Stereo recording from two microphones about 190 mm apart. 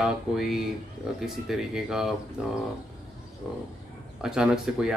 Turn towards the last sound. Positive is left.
turn(degrees=-5)  # may be behind; listen again after turning